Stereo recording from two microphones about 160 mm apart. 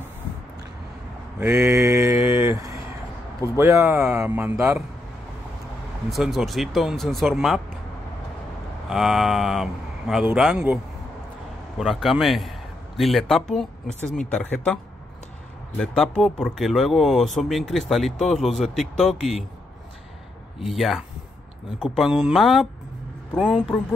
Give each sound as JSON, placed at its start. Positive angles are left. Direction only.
{"t": 1.4, "sound": "mantra", "side_deg": -15}
{"t": 3.5, "sound": "a man's voice", "side_deg": -15}
{"t": 6.0, "sound": "speech", "side_deg": 0}
{"t": 8.8, "sound": "a man's voice", "side_deg": -5}
{"t": 11.8, "sound": "a man's voice", "side_deg": 0}
{"t": 15.8, "sound": "speech", "side_deg": 5}
{"t": 20.5, "sound": "speech", "side_deg": 0}